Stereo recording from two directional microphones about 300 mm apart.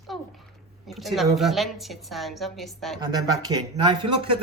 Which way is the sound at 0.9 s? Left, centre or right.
Centre.